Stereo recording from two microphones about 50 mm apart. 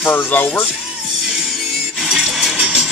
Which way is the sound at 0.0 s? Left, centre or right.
Left.